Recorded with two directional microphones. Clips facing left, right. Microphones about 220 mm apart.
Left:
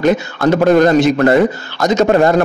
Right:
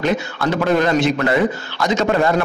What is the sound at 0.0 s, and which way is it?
A man's voice, 45° left (ahead or behind).